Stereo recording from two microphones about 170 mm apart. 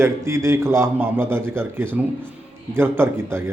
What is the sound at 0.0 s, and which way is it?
A man's voice, 15° right (ahead or behind).